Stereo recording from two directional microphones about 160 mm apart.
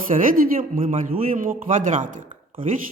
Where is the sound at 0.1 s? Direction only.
60° right (ahead or behind).